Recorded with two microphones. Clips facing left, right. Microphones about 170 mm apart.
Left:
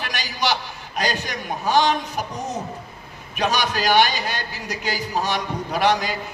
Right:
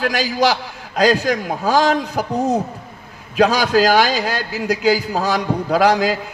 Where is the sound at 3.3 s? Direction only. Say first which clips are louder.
Right 8 dB; 90° right.